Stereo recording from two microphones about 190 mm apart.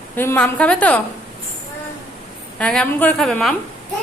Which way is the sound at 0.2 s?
10° left (ahead or behind).